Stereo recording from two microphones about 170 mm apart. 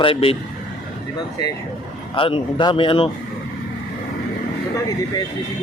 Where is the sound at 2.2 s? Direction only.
30° left (ahead or behind).